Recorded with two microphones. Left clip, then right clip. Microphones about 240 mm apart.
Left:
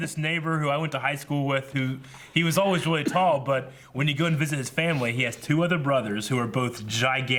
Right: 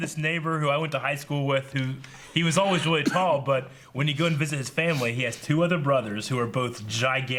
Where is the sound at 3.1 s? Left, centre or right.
Right.